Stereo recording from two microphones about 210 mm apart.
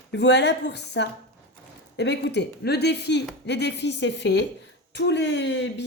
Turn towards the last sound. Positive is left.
turn(degrees=55)  # may be behind; listen again after turning